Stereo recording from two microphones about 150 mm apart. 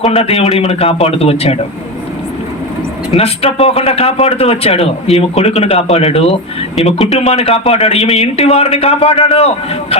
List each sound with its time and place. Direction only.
0.1 s a man's voice: 40° left (ahead or behind)
3.1 s speech: 40° left (ahead or behind)